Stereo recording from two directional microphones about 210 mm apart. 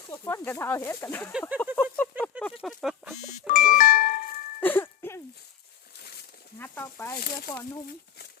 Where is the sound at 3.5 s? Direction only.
40° left (ahead or behind).